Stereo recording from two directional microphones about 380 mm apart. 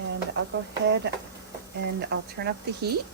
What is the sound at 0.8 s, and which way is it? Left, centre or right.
Speech, right.